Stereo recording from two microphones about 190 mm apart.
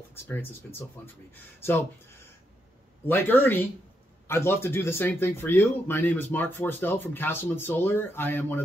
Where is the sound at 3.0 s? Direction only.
10° left (ahead or behind).